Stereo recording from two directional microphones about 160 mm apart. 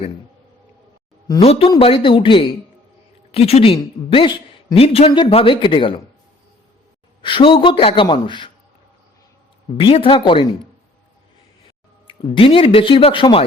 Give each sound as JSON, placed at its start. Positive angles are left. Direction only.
{"t": 1.4, "sound": "speech", "side_deg": 40}
{"t": 7.2, "sound": "speech", "side_deg": 30}
{"t": 9.7, "sound": "speech", "side_deg": 35}
{"t": 12.0, "sound": "speech", "side_deg": 35}